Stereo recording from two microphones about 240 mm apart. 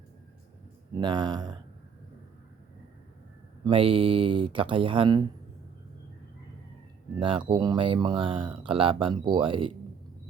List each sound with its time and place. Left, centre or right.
0.9 s speech: centre
3.6 s speech: right
7.2 s speech: right